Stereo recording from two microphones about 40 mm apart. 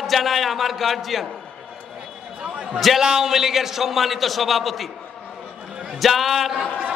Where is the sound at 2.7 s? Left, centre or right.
Centre.